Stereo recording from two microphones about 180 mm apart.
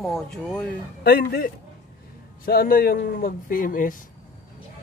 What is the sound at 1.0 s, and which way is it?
Speech, 55° left (ahead or behind).